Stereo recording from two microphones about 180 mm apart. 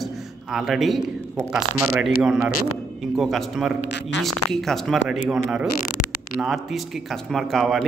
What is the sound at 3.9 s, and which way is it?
Speech, 75° left (ahead or behind).